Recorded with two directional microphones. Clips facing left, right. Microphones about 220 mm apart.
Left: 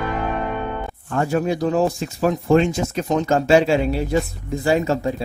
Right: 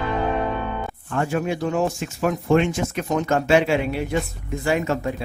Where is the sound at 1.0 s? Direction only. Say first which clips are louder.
Left 3 dB; 35° left (ahead or behind).